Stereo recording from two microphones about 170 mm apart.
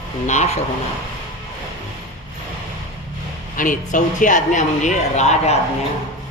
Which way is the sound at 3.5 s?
50° left (ahead or behind).